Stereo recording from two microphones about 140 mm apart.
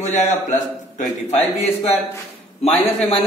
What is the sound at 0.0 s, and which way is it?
A man's voice, 60° left (ahead or behind).